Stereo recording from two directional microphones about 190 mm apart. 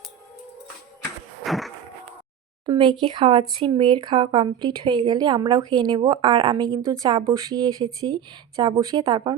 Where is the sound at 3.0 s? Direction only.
30° right (ahead or behind).